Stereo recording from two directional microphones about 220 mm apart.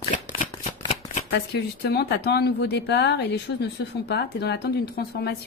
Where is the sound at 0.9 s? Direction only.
35° left (ahead or behind).